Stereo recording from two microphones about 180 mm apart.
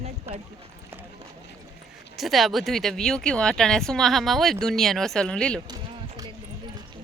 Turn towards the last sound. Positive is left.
turn(degrees=-20)  # may be behind; listen again after turning